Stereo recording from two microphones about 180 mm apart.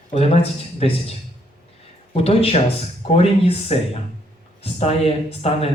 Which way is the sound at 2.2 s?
30° left (ahead or behind).